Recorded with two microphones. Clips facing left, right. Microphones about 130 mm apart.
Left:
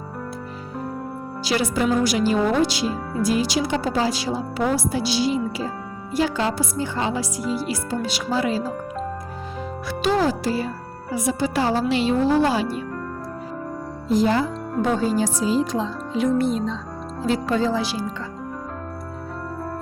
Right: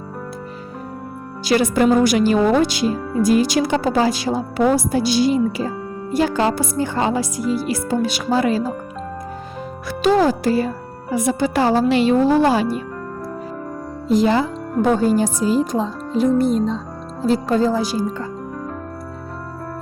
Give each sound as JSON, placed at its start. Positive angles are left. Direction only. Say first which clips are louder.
{"t": 1.5, "sound": "speech", "louder": "right 6 dB", "side_deg": -50}
{"t": 10.0, "sound": "speech", "louder": "right 5 dB", "side_deg": -50}
{"t": 14.1, "sound": "speech", "louder": "right 3 dB", "side_deg": -75}
{"t": 14.8, "sound": "speech", "louder": "right 5 dB", "side_deg": -50}
{"t": 17.2, "sound": "speech", "louder": "right 4 dB", "side_deg": -40}